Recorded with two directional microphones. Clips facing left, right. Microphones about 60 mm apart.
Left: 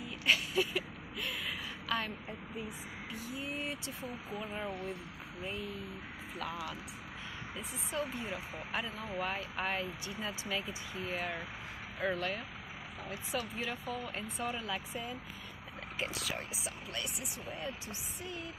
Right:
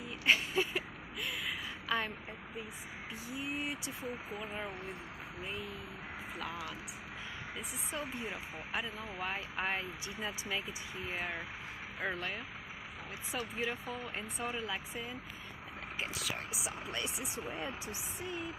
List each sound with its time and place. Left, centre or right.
0.2 s a sound: right
1.2 s a sound: centre
3.3 s speech: centre
4.4 s speech: centre
7.9 s speech: centre
8.3 s speech: centre
16.2 s speech: centre
16.9 s speech: right